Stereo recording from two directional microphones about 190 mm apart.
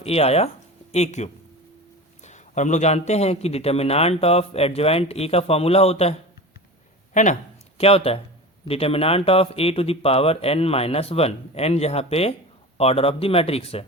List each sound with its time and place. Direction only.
0.0 s a man's voice: 30° left (ahead or behind)